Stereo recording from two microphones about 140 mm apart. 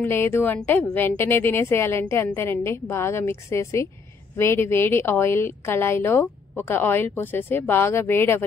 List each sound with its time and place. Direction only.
0.0 s a woman's voice: 15° left (ahead or behind)